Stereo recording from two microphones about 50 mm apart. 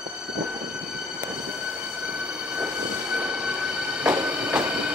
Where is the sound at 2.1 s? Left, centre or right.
Centre.